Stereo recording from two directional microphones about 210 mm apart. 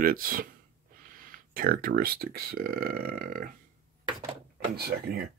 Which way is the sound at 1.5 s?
45° right (ahead or behind).